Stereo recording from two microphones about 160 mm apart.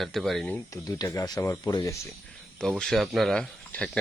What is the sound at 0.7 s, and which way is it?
Speech, 20° left (ahead or behind).